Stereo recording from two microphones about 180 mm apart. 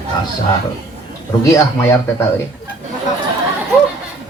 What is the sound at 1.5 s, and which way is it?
Speech, 15° left (ahead or behind).